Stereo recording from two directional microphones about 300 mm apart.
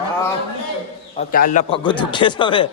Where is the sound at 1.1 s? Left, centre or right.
Left.